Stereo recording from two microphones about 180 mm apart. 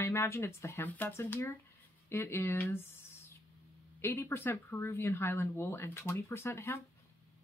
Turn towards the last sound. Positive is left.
turn(degrees=15)  # may be behind; listen again after turning